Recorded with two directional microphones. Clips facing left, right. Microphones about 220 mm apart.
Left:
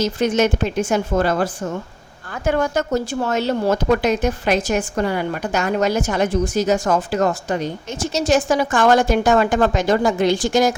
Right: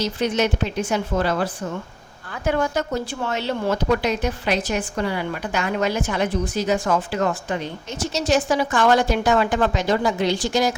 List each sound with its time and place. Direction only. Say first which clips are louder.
0.0 s a woman's voice: left 4 dB; 45° left (ahead or behind)